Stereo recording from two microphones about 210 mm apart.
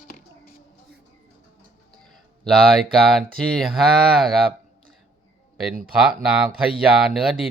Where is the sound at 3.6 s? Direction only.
Centre (ahead or behind).